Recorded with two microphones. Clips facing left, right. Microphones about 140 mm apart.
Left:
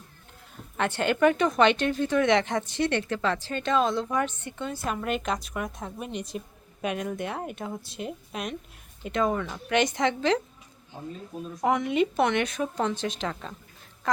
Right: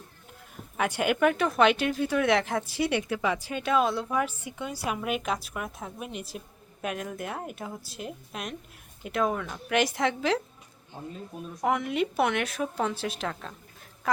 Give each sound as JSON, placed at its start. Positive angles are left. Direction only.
{"t": 0.5, "sound": "a woman's voice", "side_deg": -10}
{"t": 11.6, "sound": "speech", "side_deg": 0}